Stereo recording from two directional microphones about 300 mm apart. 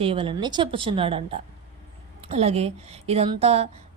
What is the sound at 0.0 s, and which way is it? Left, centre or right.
A woman's voice, centre.